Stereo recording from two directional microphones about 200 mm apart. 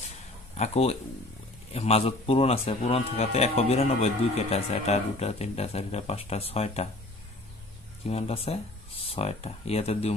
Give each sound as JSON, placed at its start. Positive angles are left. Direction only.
{"t": 0.6, "sound": "speech", "side_deg": 30}
{"t": 8.1, "sound": "speech", "side_deg": 30}